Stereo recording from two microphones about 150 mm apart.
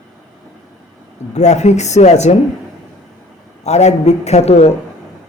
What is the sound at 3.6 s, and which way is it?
A man's voice, 45° left (ahead or behind).